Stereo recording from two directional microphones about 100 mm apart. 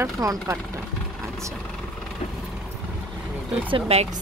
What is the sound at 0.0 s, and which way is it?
Speech, 30° right (ahead or behind).